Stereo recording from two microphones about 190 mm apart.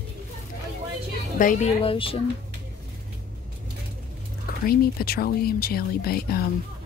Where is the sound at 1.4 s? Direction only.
45° left (ahead or behind).